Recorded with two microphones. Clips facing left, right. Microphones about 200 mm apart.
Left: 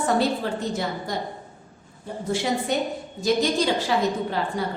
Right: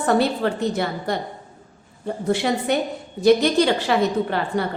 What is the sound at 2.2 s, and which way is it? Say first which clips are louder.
A woman's voice: right 4 dB; 65° right (ahead or behind).